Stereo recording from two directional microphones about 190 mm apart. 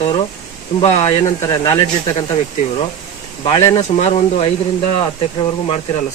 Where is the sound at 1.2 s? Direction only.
15° left (ahead or behind).